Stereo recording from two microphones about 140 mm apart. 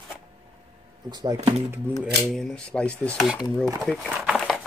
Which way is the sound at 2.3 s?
5° left (ahead or behind).